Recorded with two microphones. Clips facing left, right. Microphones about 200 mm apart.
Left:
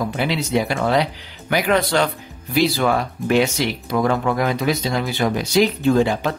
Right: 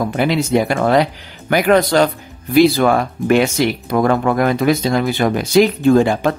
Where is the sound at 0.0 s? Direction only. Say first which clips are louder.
Right 5 dB; 50° right (ahead or behind).